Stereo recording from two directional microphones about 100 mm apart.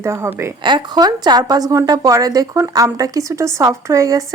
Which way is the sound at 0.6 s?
45° right (ahead or behind).